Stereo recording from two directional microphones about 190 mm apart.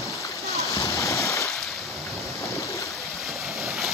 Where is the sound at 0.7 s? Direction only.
15° left (ahead or behind).